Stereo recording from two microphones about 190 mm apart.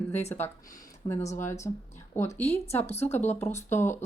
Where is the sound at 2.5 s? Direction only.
35° left (ahead or behind).